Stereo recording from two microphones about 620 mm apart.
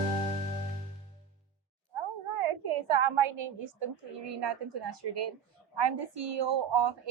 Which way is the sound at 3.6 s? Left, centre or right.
Right.